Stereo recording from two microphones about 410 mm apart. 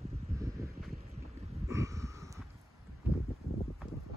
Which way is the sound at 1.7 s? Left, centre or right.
Centre.